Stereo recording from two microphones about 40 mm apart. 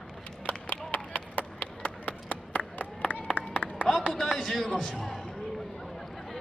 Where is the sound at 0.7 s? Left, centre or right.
Left.